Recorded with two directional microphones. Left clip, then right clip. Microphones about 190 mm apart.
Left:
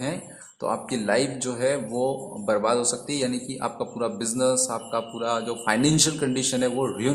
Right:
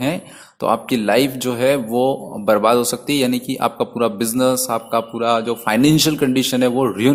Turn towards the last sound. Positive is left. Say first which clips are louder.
# right 8 dB
turn(degrees=-35)  # may be behind; listen again after turning